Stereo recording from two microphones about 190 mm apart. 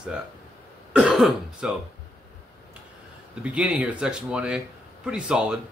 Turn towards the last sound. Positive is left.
turn(degrees=-5)  # may be behind; listen again after turning